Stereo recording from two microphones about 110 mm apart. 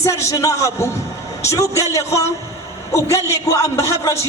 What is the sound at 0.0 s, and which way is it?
A man's voice, 25° left (ahead or behind).